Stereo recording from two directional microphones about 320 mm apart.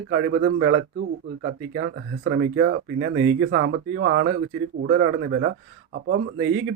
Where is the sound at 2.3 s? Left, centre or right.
Right.